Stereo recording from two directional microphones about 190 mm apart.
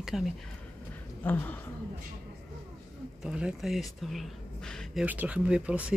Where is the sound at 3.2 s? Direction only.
5° right (ahead or behind).